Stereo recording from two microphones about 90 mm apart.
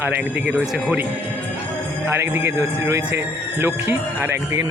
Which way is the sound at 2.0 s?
25° right (ahead or behind).